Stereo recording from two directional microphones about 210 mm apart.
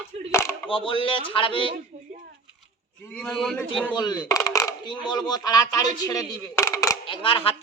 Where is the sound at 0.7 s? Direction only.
25° left (ahead or behind).